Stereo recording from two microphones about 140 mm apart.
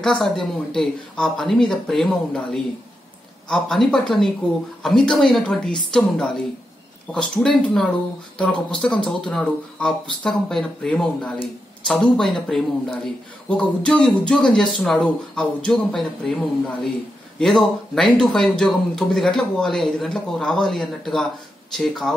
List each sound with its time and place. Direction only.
0.0 s speech: 5° left (ahead or behind)